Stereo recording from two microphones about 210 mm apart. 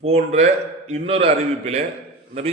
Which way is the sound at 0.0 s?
30° right (ahead or behind).